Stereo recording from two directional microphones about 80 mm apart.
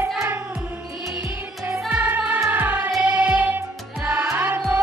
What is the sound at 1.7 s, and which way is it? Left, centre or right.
Music, centre.